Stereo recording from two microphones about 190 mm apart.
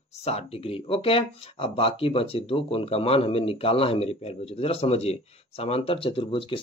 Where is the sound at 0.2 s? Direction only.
30° left (ahead or behind).